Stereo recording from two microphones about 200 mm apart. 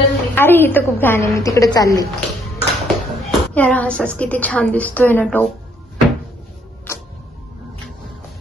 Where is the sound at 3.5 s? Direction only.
5° left (ahead or behind).